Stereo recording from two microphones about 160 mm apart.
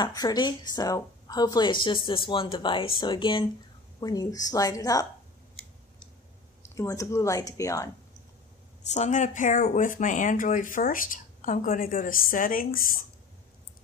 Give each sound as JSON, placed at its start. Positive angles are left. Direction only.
{"t": 0.0, "sound": "a woman's voice", "side_deg": 25}
{"t": 6.6, "sound": "a woman's voice", "side_deg": 20}
{"t": 8.9, "sound": "speech", "side_deg": 45}